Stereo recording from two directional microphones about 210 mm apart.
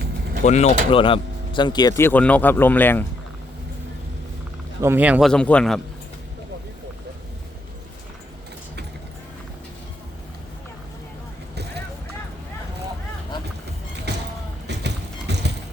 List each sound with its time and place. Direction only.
0.4 s speech: 30° left (ahead or behind); by 3.0 s 10° left (ahead or behind)
4.8 s speech: 10° right (ahead or behind)
5.3 s a man's voice: 5° left (ahead or behind)
14.1 s a sound: 55° right (ahead or behind)
14.7 s clip-clop: 55° right (ahead or behind)